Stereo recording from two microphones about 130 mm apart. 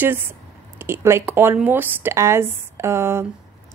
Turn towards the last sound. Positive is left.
turn(degrees=-20)  # may be behind; listen again after turning